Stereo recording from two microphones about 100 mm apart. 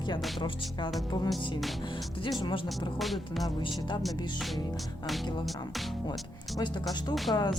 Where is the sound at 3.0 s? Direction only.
Centre (ahead or behind).